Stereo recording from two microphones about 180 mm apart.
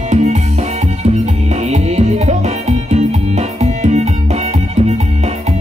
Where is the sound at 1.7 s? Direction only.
40° right (ahead or behind).